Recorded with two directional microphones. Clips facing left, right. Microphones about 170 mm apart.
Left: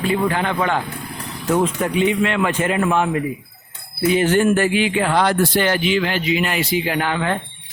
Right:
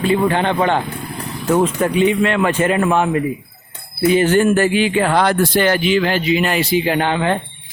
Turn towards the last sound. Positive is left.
turn(degrees=-25)  # may be behind; listen again after turning